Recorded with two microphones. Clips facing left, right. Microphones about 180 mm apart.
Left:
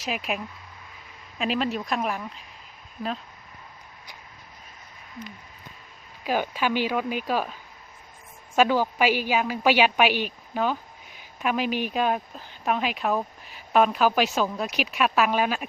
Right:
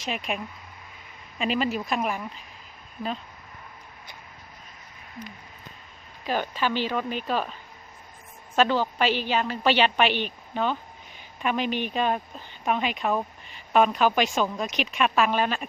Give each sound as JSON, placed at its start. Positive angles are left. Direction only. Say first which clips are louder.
{"t": 0.0, "sound": "a woman's voice", "louder": "left 1 dB", "side_deg": 5}
{"t": 6.2, "sound": "speech", "louder": "left 1 dB", "side_deg": 10}
{"t": 8.5, "sound": "a woman's voice", "louder": "left 1 dB", "side_deg": 10}